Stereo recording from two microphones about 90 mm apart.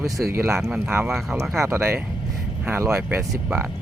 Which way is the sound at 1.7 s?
30° right (ahead or behind).